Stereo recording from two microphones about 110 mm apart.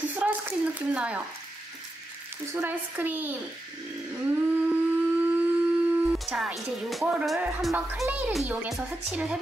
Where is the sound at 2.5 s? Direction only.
20° right (ahead or behind).